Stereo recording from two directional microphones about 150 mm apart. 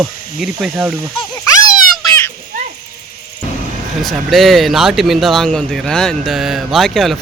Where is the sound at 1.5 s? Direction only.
25° left (ahead or behind).